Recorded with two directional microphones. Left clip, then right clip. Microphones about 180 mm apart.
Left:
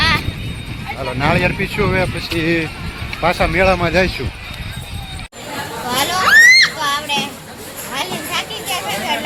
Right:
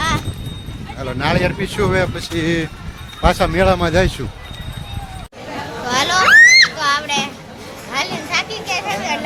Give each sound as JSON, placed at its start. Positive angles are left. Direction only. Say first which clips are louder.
{"t": 1.2, "sound": "speech", "louder": "left 1 dB", "side_deg": -10}
{"t": 5.9, "sound": "a sound", "louder": "right 2 dB", "side_deg": -10}
{"t": 6.2, "sound": "children playing", "louder": "even", "side_deg": -45}
{"t": 6.7, "sound": "child singing", "louder": "right 1 dB", "side_deg": -15}
{"t": 7.9, "sound": "children playing", "louder": "right 2 dB", "side_deg": -15}